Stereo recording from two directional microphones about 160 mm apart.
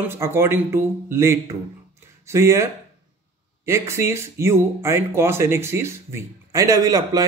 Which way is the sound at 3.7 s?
15° right (ahead or behind).